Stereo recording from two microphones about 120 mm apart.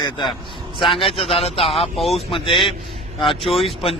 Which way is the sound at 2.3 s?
45° left (ahead or behind).